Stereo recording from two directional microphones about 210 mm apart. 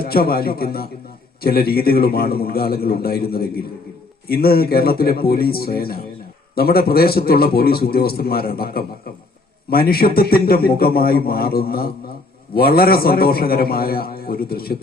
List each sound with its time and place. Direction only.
0.0 s a man's voice: 45° left (ahead or behind)